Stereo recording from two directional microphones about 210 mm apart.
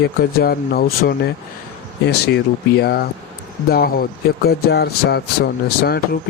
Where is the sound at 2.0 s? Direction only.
50° left (ahead or behind).